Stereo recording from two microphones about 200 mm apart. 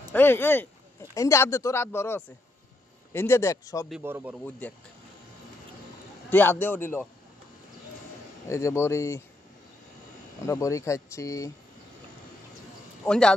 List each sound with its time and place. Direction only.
0.1 s speech: 10° left (ahead or behind)
4.0 s speech: 10° right (ahead or behind)
4.5 s speech: 10° left (ahead or behind)
6.3 s speech: 10° left (ahead or behind)
8.5 s speech: 15° left (ahead or behind)
10.4 s speech: 15° left (ahead or behind)
13.0 s speech: 5° left (ahead or behind)